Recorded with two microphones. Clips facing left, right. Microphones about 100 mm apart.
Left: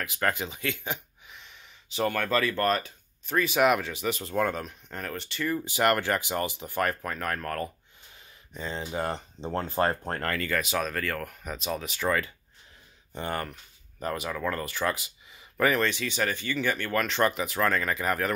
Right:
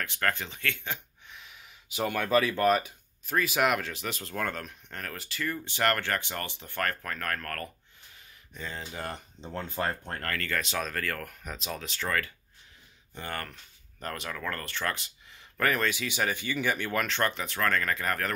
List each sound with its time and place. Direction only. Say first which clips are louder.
0.0 s speech: left 2 dB; 10° left (ahead or behind)
1.3 s speech: even; 5° right (ahead or behind); by 10.3 s 35° left (ahead or behind)
10.5 s speech: left 2 dB; 5° left (ahead or behind)
13.1 s speech: left 5 dB; 25° left (ahead or behind)
13.4 s speech: left 5 dB; 10° left (ahead or behind)
15.9 s speech: left 1 dB; 10° right (ahead or behind)
17.0 s speech: left 4 dB; 5° left (ahead or behind)